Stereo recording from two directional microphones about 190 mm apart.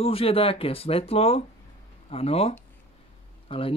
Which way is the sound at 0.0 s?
30° left (ahead or behind).